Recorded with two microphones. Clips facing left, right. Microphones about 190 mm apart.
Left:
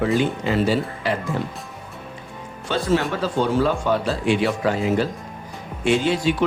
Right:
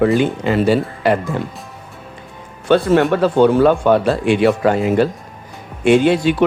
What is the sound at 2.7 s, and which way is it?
Speech, 60° right (ahead or behind).